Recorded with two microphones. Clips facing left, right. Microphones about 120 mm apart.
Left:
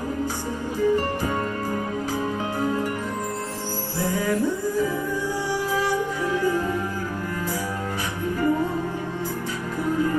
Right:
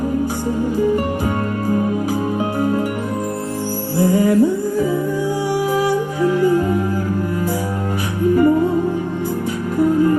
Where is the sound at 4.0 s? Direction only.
15° right (ahead or behind).